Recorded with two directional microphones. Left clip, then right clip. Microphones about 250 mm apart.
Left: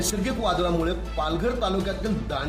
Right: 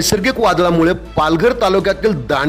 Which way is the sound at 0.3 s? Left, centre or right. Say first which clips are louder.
Right 11 dB; right.